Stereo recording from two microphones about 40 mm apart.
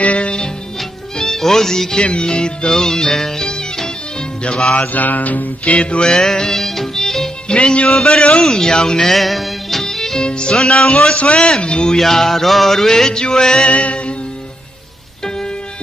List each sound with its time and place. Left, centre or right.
0.0 s music: left
1.1 s music: centre
2.0 s music: left
2.7 s music: centre
4.7 s mantra: left
5.8 s music: left; by 7.2 s centre
7.4 s music: left
7.9 s music: centre
9.1 s music: centre
10.2 s music: left
11.1 s music: left
12.0 s music: centre
13.7 s music: left
15.2 s music: centre